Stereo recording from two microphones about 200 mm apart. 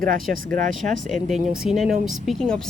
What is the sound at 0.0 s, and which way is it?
Speech, 45° right (ahead or behind).